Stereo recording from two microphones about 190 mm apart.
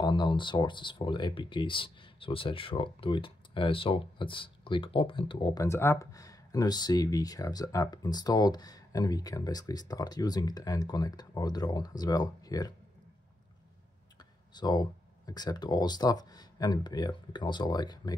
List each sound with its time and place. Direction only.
0.0 s speech: 25° left (ahead or behind)
14.1 s speech: 20° left (ahead or behind)